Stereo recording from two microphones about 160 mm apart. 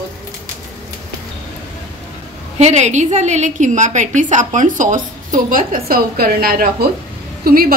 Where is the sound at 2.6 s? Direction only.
45° right (ahead or behind).